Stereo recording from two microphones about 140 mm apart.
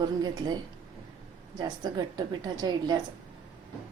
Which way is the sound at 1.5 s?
30° right (ahead or behind).